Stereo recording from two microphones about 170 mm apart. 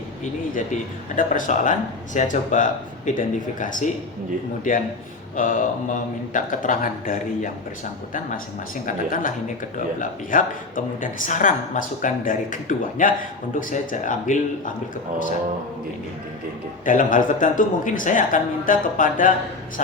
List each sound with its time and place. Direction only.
0.5 s speech: 50° left (ahead or behind)
9.0 s speech: 55° left (ahead or behind)
16.8 s speech: 50° left (ahead or behind)